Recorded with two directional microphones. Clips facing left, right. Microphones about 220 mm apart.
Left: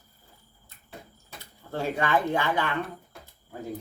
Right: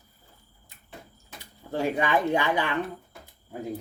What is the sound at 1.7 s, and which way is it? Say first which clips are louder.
Speech: right 1 dB; 15° right (ahead or behind).